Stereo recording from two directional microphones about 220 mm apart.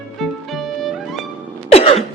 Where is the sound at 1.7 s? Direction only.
25° left (ahead or behind).